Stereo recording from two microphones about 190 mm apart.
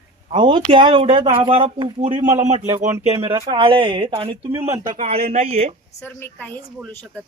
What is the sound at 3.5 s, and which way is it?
Speech, 30° right (ahead or behind).